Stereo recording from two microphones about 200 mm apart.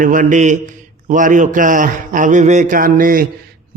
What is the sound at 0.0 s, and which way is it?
A man's voice, 40° right (ahead or behind).